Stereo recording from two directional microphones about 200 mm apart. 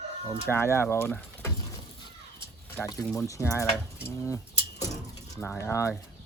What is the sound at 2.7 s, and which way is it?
Speech, 15° left (ahead or behind).